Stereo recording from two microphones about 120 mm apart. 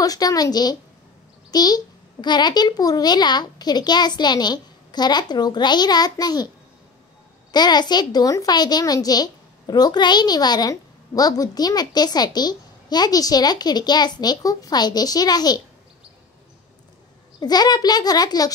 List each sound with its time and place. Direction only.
0.0 s a child's voice: 30° left (ahead or behind)
7.5 s a child's voice: 35° left (ahead or behind)
17.4 s a child's voice: 35° left (ahead or behind)